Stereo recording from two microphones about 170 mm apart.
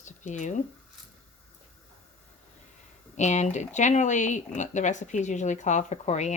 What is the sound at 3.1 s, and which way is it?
Speech, 45° left (ahead or behind).